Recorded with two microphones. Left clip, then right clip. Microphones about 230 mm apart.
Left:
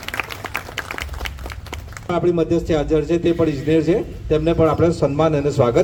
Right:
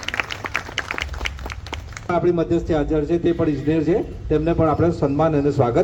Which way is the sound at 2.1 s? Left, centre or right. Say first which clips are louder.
Left 1 dB; left.